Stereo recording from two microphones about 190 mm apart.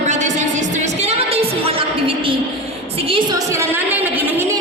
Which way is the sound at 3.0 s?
30° right (ahead or behind).